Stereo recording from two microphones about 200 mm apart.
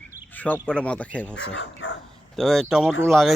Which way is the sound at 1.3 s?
70° left (ahead or behind).